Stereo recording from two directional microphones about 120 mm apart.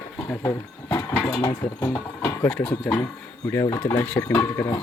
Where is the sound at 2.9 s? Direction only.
10° left (ahead or behind).